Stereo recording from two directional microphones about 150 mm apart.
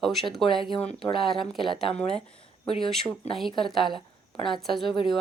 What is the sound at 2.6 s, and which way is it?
Speech, 35° left (ahead or behind).